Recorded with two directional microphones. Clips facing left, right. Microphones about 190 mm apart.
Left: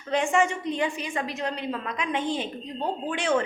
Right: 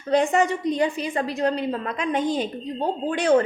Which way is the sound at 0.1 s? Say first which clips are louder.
Right 4 dB; 40° right (ahead or behind).